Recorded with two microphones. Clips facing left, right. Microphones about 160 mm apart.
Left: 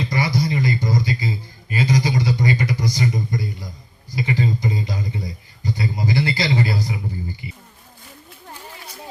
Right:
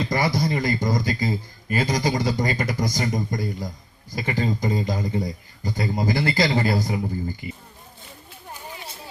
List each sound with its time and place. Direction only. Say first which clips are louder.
0.1 s a man's voice: left 1 dB; 50° right (ahead or behind)